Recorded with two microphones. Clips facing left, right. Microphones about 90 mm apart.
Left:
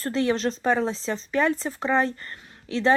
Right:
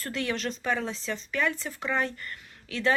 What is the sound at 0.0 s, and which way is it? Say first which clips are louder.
Speech: left 7 dB; 35° left (ahead or behind).